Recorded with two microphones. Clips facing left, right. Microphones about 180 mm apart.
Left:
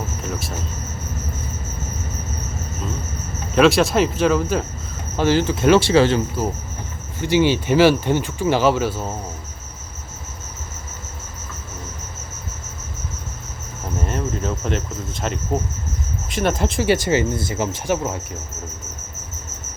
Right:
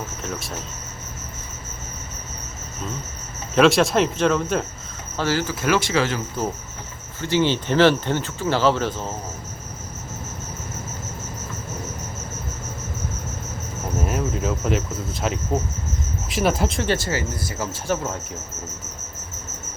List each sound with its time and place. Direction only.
0.2 s speech: centre (ahead or behind)
3.5 s cricket: centre (ahead or behind)
5.1 s speech: 20° left (ahead or behind)
7.2 s speech: 15° left (ahead or behind)
14.0 s cricket: 5° right (ahead or behind)
16.9 s speech: 20° left (ahead or behind)